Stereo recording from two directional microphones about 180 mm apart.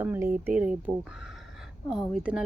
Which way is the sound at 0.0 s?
10° right (ahead or behind).